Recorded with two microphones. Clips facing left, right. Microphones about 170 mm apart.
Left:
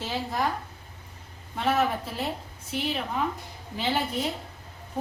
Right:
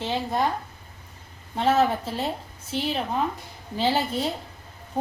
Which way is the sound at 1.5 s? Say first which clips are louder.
Right 4 dB; 30° right (ahead or behind).